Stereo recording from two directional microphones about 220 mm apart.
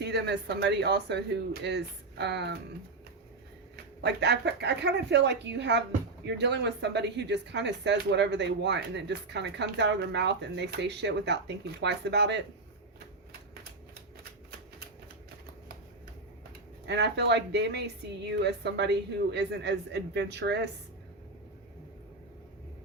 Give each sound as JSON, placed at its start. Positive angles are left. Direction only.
{"t": 0.0, "sound": "speech", "side_deg": -50}
{"t": 4.0, "sound": "speech", "side_deg": -50}
{"t": 16.8, "sound": "speech", "side_deg": -50}